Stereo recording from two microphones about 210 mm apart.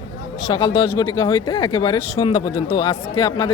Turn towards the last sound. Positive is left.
turn(degrees=20)  # may be behind; listen again after turning